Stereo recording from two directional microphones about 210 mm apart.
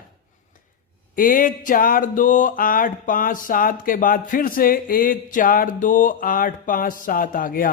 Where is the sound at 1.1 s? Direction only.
40° left (ahead or behind).